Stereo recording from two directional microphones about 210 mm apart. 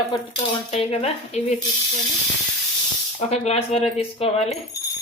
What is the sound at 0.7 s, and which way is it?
Speech, 30° left (ahead or behind).